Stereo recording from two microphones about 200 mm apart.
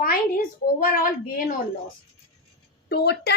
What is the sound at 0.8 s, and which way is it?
Speech, 45° left (ahead or behind).